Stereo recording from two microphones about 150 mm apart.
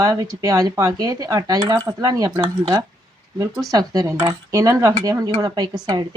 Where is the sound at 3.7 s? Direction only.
20° right (ahead or behind).